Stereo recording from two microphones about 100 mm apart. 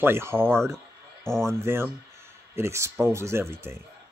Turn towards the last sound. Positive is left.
turn(degrees=-25)  # may be behind; listen again after turning